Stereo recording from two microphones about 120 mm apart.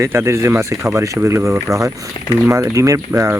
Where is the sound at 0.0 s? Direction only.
20° right (ahead or behind).